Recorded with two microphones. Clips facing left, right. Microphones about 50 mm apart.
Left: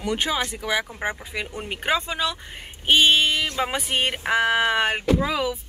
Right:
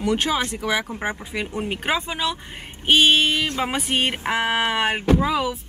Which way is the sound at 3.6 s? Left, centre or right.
Centre.